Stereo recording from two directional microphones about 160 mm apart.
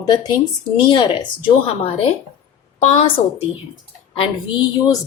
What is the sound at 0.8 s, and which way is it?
A woman's voice, 30° left (ahead or behind).